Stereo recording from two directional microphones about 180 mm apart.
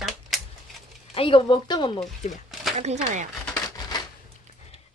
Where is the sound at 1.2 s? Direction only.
30° left (ahead or behind).